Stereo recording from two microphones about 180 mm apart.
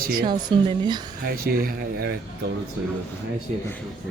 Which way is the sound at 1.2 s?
55° right (ahead or behind).